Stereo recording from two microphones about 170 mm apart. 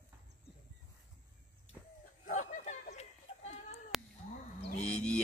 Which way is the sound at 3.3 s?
30° left (ahead or behind).